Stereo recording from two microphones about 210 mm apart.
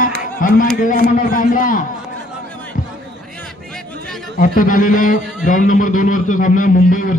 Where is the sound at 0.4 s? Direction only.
40° left (ahead or behind).